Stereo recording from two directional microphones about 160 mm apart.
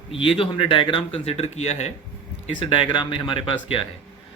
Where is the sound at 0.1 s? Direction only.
35° left (ahead or behind).